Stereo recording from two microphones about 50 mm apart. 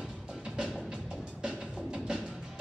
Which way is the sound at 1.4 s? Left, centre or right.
Centre.